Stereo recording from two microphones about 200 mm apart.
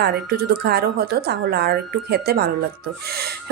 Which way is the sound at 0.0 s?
50° right (ahead or behind).